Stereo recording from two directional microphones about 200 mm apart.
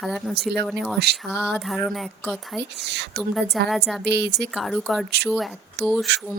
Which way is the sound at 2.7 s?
60° right (ahead or behind).